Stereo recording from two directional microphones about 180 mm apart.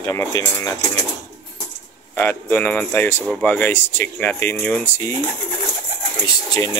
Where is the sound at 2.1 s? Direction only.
10° left (ahead or behind).